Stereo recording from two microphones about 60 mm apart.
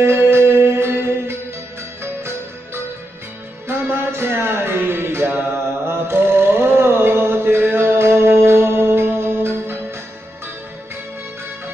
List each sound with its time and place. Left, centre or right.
0.0 s music: right
3.6 s music: right
5.9 s mantra: right
7.6 s music: right